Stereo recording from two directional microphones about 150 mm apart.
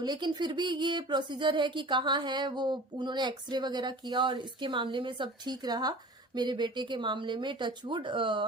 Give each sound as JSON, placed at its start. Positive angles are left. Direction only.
{"t": 0.0, "sound": "speech", "side_deg": -30}